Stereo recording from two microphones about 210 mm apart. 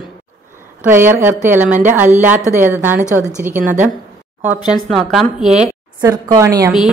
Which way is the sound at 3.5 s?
35° right (ahead or behind).